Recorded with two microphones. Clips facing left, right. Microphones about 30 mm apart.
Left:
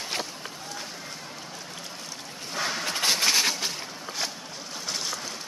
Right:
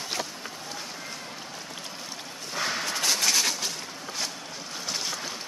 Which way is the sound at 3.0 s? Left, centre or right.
Left.